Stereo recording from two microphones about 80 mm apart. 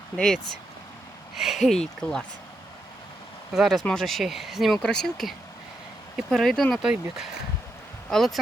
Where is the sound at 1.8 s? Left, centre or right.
Centre.